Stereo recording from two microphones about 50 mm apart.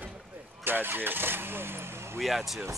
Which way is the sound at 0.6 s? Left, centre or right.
Right.